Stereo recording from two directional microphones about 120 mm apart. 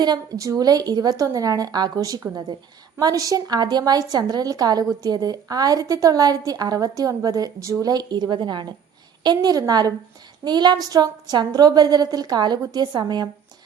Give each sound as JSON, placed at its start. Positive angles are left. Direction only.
{"t": 0.0, "sound": "a woman's voice", "side_deg": -35}